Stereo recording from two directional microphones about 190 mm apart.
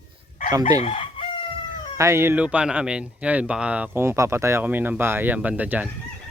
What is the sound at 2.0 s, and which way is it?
Speech, 15° right (ahead or behind).